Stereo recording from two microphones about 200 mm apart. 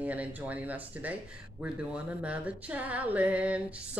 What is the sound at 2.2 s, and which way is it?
Speech, 5° right (ahead or behind).